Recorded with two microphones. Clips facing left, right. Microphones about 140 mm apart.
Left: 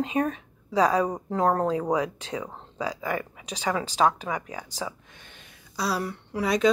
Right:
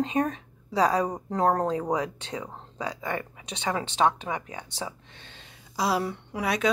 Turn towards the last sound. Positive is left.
turn(degrees=-5)  # may be behind; listen again after turning